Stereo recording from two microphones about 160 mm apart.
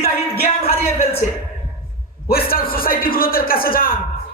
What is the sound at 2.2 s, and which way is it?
A man's voice, 70° left (ahead or behind).